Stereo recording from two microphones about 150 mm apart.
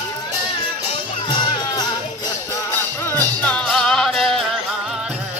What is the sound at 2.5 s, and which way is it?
Music, 15° left (ahead or behind).